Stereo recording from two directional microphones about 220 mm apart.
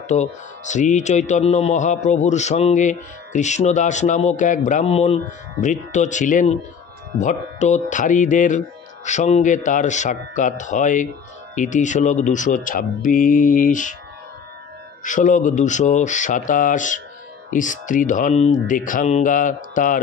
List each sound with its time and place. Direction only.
0.1 s speech: 35° left (ahead or behind)
15.0 s speech: 35° left (ahead or behind)